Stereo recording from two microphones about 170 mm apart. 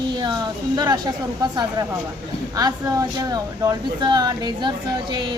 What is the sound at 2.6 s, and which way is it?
Speech, 20° right (ahead or behind).